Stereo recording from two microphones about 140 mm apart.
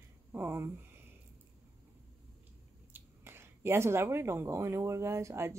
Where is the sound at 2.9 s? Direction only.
15° right (ahead or behind).